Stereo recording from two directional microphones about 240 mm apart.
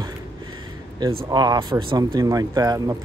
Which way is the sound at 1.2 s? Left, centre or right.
Centre.